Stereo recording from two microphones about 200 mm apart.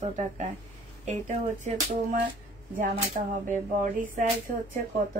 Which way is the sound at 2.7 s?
40° right (ahead or behind).